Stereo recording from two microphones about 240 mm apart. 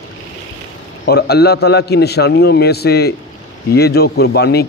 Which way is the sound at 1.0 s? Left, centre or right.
Left.